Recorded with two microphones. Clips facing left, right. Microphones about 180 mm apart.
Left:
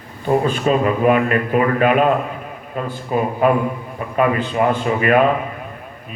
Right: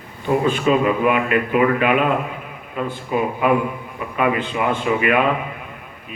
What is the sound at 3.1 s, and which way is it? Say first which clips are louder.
A man's voice: left 2 dB; 40° left (ahead or behind).